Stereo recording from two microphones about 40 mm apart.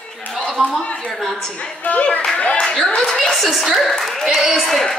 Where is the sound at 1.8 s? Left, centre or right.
Left.